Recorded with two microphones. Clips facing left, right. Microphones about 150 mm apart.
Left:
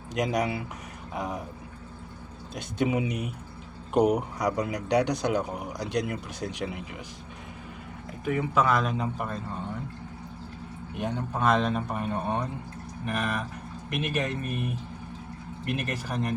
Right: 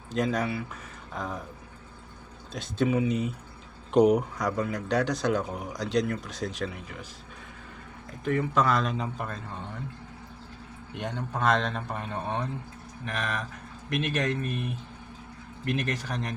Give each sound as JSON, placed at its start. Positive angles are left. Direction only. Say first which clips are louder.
{"t": 0.1, "sound": "speech", "louder": "left 1 dB", "side_deg": 15}
{"t": 2.6, "sound": "speech", "louder": "right 1 dB", "side_deg": 15}
{"t": 8.2, "sound": "speech", "louder": "even", "side_deg": 10}
{"t": 10.9, "sound": "speech", "louder": "left 2 dB", "side_deg": 5}